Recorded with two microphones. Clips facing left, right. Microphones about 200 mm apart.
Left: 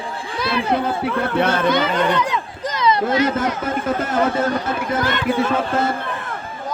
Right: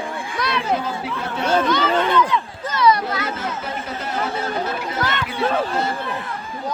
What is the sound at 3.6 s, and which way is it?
Speech, 50° left (ahead or behind).